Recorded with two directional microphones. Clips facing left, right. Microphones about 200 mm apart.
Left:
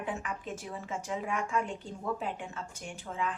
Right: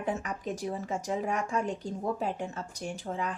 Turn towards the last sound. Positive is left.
turn(degrees=-40)  # may be behind; listen again after turning